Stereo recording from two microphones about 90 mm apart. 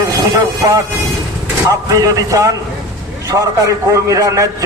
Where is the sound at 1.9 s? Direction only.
40° right (ahead or behind).